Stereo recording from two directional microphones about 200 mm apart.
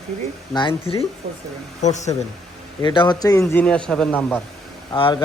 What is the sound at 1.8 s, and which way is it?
Speech, 35° left (ahead or behind).